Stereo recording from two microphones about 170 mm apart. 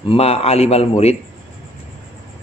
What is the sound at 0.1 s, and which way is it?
A man's voice, 35° left (ahead or behind).